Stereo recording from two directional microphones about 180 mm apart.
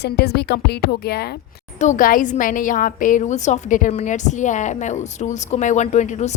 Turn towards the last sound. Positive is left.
turn(degrees=40)  # may be behind; listen again after turning